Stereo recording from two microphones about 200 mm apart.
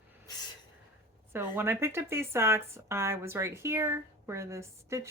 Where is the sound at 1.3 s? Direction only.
10° right (ahead or behind).